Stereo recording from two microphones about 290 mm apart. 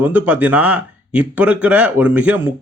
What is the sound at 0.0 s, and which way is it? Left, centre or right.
Speech, centre.